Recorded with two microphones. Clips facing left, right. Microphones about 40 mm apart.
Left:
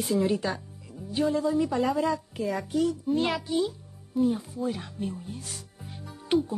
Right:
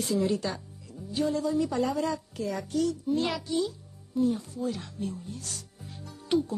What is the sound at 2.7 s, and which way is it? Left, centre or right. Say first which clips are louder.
A child's voice: left 1 dB; centre.